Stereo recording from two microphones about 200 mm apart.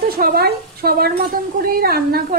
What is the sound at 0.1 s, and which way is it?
A woman's voice, 50° right (ahead or behind).